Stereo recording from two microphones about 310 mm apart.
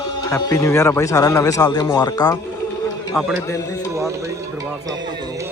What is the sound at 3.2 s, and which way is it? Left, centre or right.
Speech, centre.